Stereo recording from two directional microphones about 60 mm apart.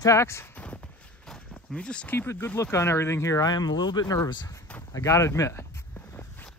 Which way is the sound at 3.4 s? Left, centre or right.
Left.